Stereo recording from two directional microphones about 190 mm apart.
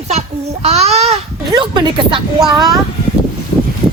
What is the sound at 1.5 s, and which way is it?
Speech, 20° right (ahead or behind).